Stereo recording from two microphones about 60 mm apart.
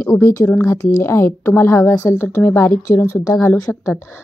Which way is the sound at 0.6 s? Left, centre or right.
Left.